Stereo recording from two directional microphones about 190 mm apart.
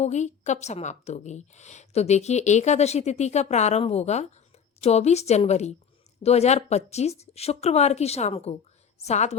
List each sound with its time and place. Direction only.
0.0 s a woman's voice: 40° left (ahead or behind)